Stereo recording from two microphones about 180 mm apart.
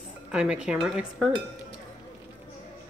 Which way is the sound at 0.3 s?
5° right (ahead or behind).